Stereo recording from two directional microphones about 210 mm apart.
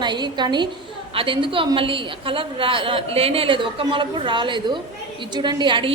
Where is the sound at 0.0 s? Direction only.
20° right (ahead or behind).